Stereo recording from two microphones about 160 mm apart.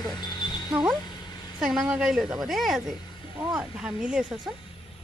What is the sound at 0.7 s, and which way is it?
Speech, 5° right (ahead or behind).